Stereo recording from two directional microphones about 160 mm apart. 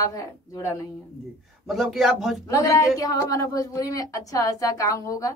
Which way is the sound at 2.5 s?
20° left (ahead or behind).